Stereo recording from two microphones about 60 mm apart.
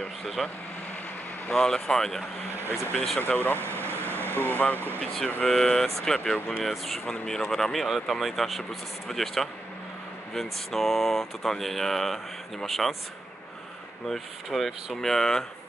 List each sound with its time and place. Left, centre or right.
0.2 s speech: centre
1.5 s speech: centre
3.2 s speech: left
3.5 s vehicle: right
4.3 s speech: left
4.7 s speech: right
5.0 s speech: centre
6.3 s speech: left
6.6 s speech: centre
14.0 s speech: centre